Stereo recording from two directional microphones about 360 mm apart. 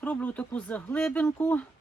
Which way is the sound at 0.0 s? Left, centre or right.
Centre.